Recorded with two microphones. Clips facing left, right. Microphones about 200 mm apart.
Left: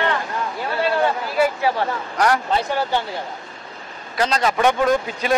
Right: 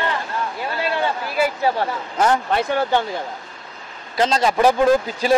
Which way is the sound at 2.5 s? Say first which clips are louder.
Right 2 dB; 55° right (ahead or behind).